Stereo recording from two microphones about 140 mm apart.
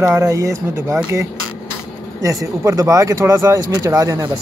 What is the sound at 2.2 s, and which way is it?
Speech, 25° right (ahead or behind).